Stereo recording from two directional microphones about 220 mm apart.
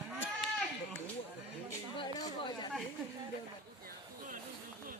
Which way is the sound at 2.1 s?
20° left (ahead or behind).